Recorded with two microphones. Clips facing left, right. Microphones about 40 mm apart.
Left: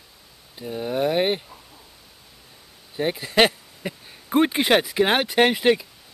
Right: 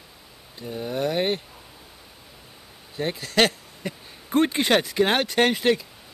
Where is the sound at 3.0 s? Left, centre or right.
Centre.